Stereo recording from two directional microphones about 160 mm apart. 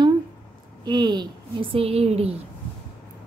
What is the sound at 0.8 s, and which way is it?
A woman's voice, 25° right (ahead or behind).